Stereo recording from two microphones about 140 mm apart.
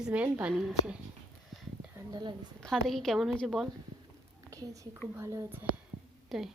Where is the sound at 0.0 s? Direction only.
10° right (ahead or behind).